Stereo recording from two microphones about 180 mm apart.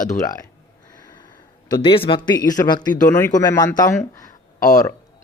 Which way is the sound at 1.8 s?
30° left (ahead or behind).